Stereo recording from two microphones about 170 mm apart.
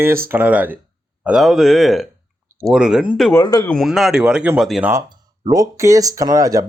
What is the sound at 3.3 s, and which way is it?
Speech, 20° left (ahead or behind).